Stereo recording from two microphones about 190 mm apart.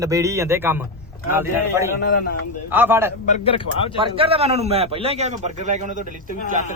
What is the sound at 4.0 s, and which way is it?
A man's voice, 30° right (ahead or behind).